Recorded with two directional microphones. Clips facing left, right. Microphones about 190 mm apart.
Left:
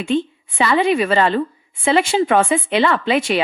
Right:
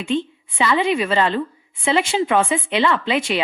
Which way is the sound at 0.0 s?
50° left (ahead or behind).